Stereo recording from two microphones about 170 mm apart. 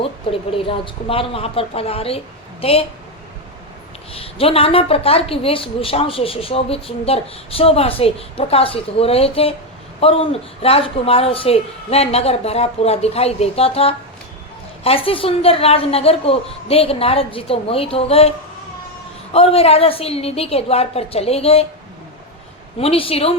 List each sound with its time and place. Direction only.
0.0 s a woman's voice: 30° left (ahead or behind)
4.1 s a woman's voice: 35° left (ahead or behind)
22.8 s a woman's voice: 35° left (ahead or behind)